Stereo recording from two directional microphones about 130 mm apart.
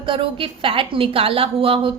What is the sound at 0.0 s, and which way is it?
A woman's voice, 40° right (ahead or behind).